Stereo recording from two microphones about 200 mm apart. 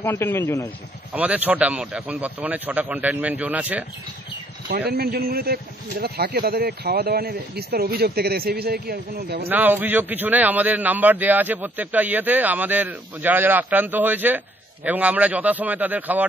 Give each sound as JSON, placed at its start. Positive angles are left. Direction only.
{"t": 0.0, "sound": "speech", "side_deg": 10}
{"t": 1.1, "sound": "a man's voice", "side_deg": -5}
{"t": 4.6, "sound": "a man's voice", "side_deg": -50}
{"t": 9.5, "sound": "a man's voice", "side_deg": -10}